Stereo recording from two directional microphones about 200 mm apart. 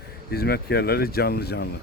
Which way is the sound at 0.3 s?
50° left (ahead or behind).